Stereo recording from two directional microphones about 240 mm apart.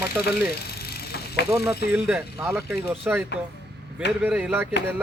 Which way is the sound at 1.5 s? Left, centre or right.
Centre.